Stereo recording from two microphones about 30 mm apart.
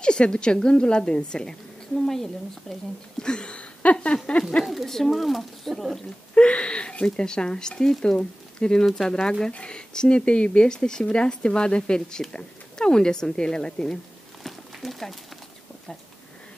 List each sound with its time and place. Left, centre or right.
0.0 s a woman's voice: left
2.0 s speech: centre
3.2 s a sound: left
3.8 s speech: left
4.8 s speech: centre
6.3 s a woman's voice: left
14.4 s a sound: centre